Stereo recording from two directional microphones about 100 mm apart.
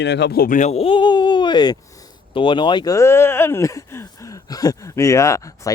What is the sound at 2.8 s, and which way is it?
Speech, 30° left (ahead or behind).